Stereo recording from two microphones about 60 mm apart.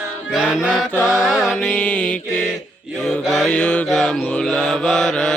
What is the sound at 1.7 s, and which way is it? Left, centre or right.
Mantra, left.